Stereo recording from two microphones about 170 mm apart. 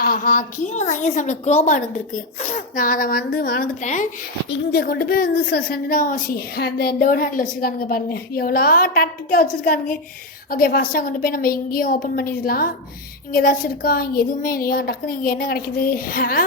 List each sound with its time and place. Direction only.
0.0 s a woman's voice: 55° left (ahead or behind)
4.4 s a woman's voice: 75° left (ahead or behind); by 16.4 s 55° left (ahead or behind)